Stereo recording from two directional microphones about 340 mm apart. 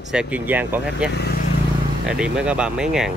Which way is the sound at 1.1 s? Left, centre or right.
Left.